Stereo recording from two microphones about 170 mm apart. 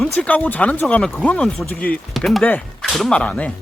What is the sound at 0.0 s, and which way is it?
Speech, 5° left (ahead or behind).